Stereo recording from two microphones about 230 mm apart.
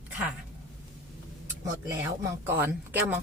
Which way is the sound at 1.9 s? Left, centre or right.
Centre.